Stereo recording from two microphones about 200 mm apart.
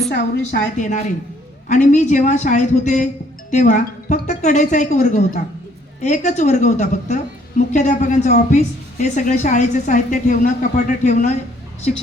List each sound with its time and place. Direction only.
0.1 s a woman's voice: 60° left (ahead or behind)
0.8 s a woman's voice: 35° left (ahead or behind)